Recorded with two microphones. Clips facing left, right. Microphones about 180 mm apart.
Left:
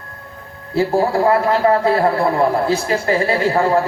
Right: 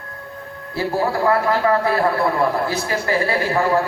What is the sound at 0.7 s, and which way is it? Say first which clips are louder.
A man's voice: left 5 dB; 25° left (ahead or behind).